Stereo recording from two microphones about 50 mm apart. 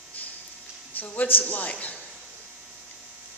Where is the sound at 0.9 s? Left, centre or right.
Left.